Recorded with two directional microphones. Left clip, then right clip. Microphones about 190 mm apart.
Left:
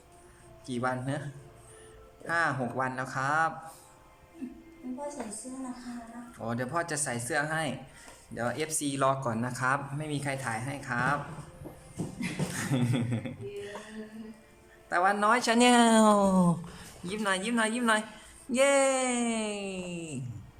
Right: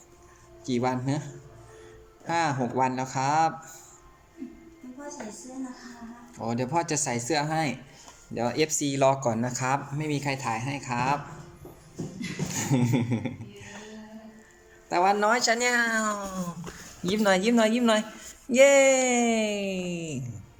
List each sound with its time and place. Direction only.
0.6 s speech: 15° right (ahead or behind)
2.2 s speech: 15° right (ahead or behind)
6.3 s speech: 15° right (ahead or behind)
12.5 s a sound: 15° right (ahead or behind)
14.8 s speech: 15° right (ahead or behind)
15.5 s speech: 10° left (ahead or behind); by 16.3 s 25° left (ahead or behind)
17.0 s speech: 25° right (ahead or behind)